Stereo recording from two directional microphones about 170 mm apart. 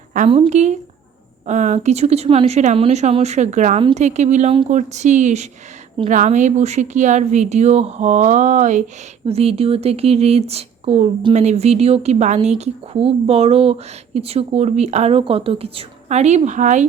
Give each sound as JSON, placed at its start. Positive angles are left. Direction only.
{"t": 0.3, "sound": "a woman's voice", "side_deg": -35}